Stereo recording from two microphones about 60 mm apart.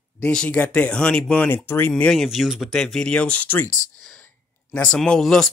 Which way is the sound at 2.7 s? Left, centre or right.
Centre.